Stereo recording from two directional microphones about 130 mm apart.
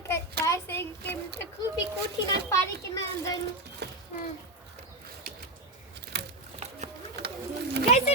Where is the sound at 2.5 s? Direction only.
25° left (ahead or behind).